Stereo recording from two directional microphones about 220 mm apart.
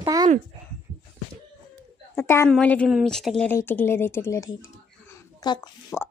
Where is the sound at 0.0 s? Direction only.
15° right (ahead or behind).